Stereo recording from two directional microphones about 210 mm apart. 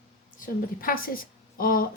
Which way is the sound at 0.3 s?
40° left (ahead or behind).